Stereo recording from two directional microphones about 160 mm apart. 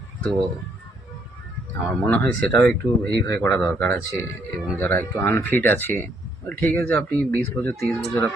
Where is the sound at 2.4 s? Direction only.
10° left (ahead or behind).